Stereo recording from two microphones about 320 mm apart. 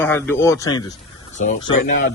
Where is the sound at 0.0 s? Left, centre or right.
Centre.